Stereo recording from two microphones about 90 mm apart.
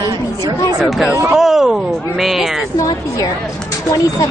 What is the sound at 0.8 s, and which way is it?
Speech, centre (ahead or behind).